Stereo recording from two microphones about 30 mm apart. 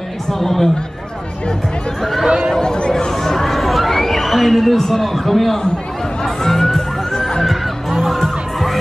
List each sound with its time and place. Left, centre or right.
0.3 s speech: centre
2.5 s speech: left
2.9 s a sound: centre
3.4 s a sound: centre
6.2 s music: centre
7.4 s music: centre